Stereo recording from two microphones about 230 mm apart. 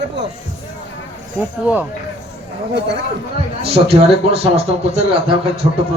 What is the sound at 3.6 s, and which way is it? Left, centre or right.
Speech, right.